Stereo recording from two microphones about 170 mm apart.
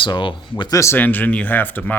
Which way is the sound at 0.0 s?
30° left (ahead or behind).